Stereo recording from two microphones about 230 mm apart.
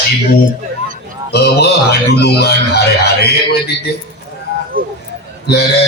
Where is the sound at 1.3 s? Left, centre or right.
Left.